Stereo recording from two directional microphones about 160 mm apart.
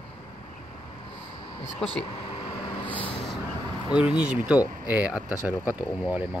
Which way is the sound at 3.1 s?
Centre (ahead or behind).